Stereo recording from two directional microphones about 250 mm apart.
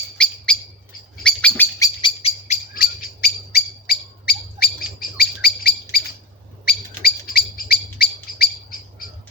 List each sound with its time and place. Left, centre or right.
0.2 s bird: centre
2.0 s bird: left
2.7 s owl: left
6.7 s bird: left